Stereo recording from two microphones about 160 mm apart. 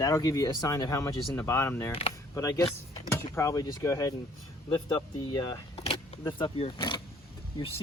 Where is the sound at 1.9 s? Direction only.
35° left (ahead or behind).